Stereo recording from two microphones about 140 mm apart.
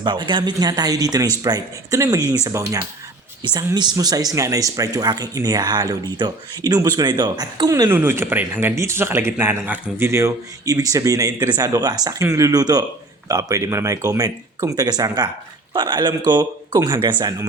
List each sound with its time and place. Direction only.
0.0 s a man's voice: 35° right (ahead or behind)
3.4 s a man's voice: 35° right (ahead or behind)
7.9 s a man's voice: 15° right (ahead or behind)